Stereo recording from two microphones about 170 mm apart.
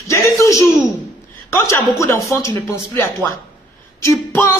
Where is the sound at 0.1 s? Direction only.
15° left (ahead or behind).